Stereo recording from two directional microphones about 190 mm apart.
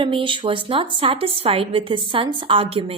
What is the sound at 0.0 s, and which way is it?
A woman's voice, 25° right (ahead or behind).